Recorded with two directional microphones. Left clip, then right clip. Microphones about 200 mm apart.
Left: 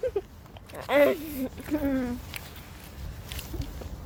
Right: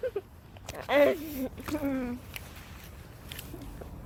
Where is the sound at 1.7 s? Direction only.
25° left (ahead or behind).